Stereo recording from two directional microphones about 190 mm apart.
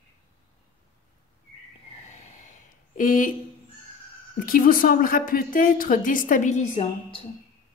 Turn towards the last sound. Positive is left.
turn(degrees=35)  # may be behind; listen again after turning